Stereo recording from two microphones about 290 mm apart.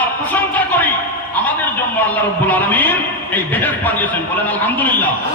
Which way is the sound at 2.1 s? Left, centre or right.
Centre.